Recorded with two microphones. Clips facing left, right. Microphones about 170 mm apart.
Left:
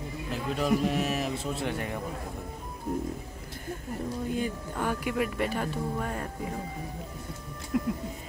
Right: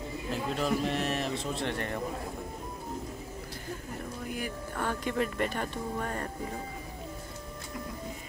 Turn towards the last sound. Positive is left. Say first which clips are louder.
# left 11 dB
turn(degrees=70)  # may be behind; listen again after turning